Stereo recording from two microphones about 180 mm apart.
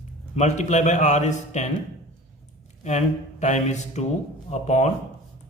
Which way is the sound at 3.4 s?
40° left (ahead or behind).